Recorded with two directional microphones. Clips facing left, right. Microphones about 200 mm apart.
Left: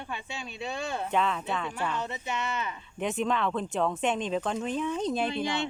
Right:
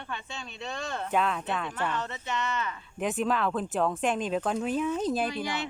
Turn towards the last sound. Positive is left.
turn(degrees=25)  # may be behind; listen again after turning